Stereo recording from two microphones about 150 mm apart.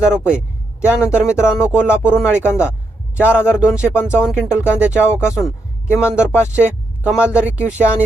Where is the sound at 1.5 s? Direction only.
5° right (ahead or behind).